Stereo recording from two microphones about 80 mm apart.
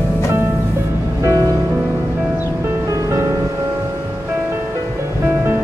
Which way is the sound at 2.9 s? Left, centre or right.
Right.